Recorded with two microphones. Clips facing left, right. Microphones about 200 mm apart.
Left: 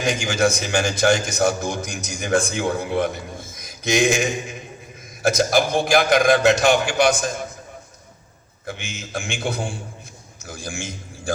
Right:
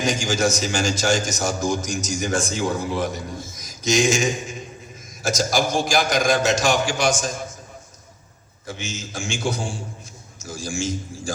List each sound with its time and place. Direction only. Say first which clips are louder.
0.0 s a man's voice: left 1 dB; 60° left (ahead or behind)
8.6 s a man's voice: right 1 dB; 60° left (ahead or behind)